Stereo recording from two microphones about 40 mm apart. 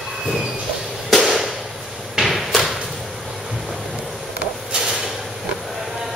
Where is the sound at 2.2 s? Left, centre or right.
Centre.